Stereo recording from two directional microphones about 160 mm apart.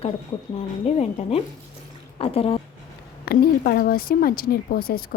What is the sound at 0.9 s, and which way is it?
A woman's voice, 40° left (ahead or behind).